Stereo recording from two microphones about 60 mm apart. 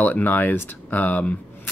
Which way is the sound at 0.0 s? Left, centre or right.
Left.